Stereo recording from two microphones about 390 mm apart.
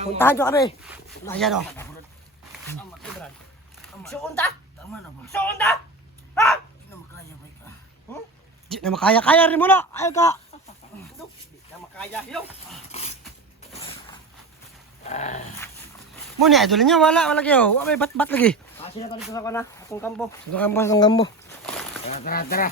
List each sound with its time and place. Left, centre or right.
0.2 s speech: centre
3.8 s a sound: centre
5.2 s speech: centre
8.7 s speech: centre
11.9 s speech: centre
12.9 s dog: centre
13.7 s a sound: centre
15.0 s dog: centre
16.5 s speech: centre
18.8 s a sound: centre
19.2 s speech: centre